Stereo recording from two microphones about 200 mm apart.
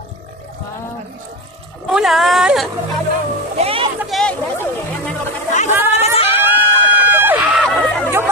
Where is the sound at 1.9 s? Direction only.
Centre (ahead or behind).